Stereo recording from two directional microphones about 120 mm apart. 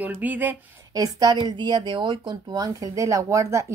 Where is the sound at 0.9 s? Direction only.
30° right (ahead or behind).